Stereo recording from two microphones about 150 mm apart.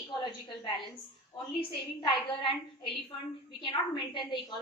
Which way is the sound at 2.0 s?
35° left (ahead or behind).